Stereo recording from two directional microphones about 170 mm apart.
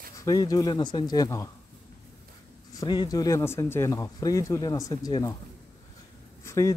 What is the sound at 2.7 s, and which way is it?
Speech, 25° left (ahead or behind).